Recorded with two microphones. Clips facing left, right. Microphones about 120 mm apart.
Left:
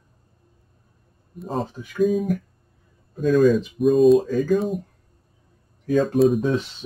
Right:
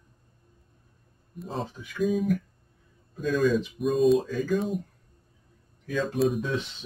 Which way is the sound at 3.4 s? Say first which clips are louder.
Left 5 dB; centre (ahead or behind).